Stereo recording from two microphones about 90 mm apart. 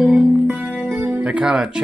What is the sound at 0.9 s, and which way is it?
Music, 25° right (ahead or behind).